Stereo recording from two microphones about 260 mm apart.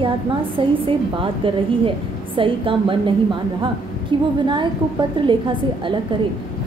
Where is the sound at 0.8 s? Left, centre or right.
Centre.